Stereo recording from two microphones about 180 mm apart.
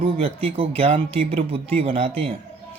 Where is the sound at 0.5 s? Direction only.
30° right (ahead or behind).